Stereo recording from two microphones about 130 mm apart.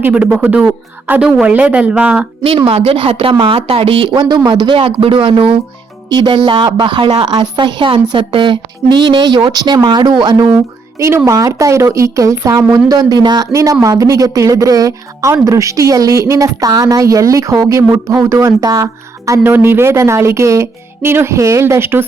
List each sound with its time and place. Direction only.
0.0 s a woman's voice: 10° right (ahead or behind)
2.4 s a woman's voice: 45° right (ahead or behind); by 22.0 s 20° right (ahead or behind)